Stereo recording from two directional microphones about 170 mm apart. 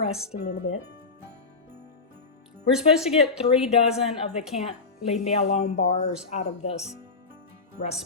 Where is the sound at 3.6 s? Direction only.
40° left (ahead or behind).